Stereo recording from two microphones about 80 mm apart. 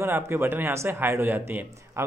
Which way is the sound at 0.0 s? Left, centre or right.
Right.